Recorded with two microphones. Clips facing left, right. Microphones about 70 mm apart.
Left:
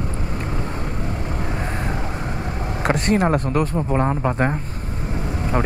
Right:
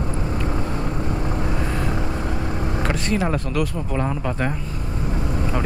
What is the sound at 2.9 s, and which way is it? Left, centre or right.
Speech, left.